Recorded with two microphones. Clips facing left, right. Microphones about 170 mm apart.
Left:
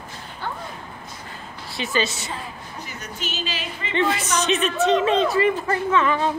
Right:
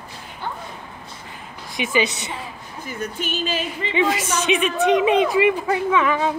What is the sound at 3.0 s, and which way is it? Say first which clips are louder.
Speech: right 6 dB; 55° right (ahead or behind).